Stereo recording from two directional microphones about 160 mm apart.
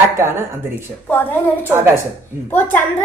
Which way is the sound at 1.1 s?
15° left (ahead or behind).